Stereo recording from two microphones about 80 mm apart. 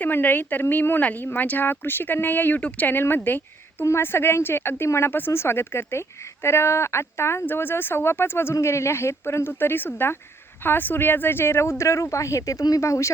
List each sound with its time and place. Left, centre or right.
0.0 s speech: left